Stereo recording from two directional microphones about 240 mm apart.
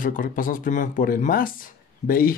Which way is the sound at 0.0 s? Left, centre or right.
Left.